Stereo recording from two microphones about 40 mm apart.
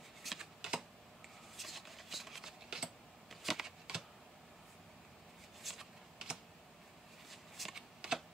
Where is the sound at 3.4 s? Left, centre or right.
Centre.